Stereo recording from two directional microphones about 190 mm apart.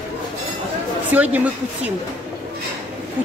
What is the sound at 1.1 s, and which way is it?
Speech, 10° right (ahead or behind).